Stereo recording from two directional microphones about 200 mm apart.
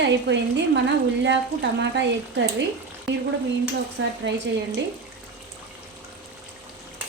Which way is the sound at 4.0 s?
70° right (ahead or behind).